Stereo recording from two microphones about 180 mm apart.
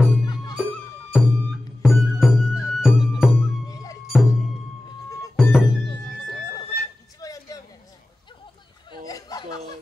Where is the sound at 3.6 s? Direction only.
20° left (ahead or behind).